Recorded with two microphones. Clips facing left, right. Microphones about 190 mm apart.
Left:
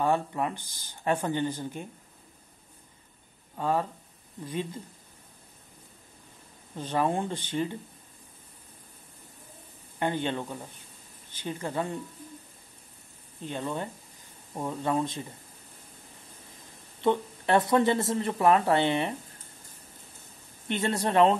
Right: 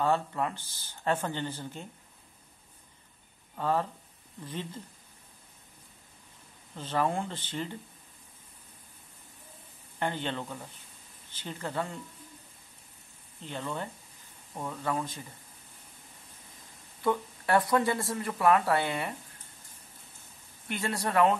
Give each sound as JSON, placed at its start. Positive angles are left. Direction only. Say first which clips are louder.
{"t": 0.0, "sound": "speech", "louder": "left 2 dB", "side_deg": 15}
{"t": 3.5, "sound": "speech", "louder": "left 1 dB", "side_deg": 15}
{"t": 6.7, "sound": "speech", "louder": "left 2 dB", "side_deg": 15}
{"t": 9.9, "sound": "speech", "louder": "left 4 dB", "side_deg": 15}
{"t": 13.4, "sound": "speech", "louder": "left 3 dB", "side_deg": 15}
{"t": 17.0, "sound": "speech", "louder": "left 3 dB", "side_deg": 25}
{"t": 20.6, "sound": "speech", "louder": "left 4 dB", "side_deg": 25}